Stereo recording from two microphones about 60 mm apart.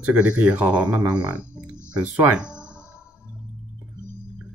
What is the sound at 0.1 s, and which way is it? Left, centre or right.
Speech, right.